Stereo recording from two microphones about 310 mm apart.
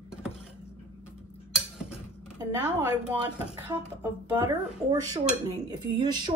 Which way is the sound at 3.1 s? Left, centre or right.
Centre.